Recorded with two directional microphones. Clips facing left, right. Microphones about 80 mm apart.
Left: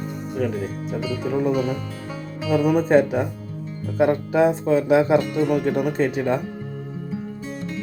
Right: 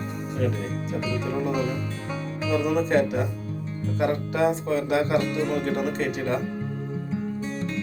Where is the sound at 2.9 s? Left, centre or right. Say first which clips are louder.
Left 5 dB; left.